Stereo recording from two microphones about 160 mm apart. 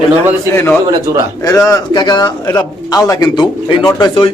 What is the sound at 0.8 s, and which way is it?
Speech, 20° right (ahead or behind).